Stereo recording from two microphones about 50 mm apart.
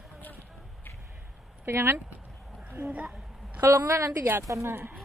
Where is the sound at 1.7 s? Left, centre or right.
Right.